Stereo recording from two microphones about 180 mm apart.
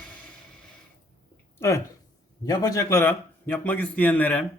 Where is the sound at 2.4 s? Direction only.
20° left (ahead or behind).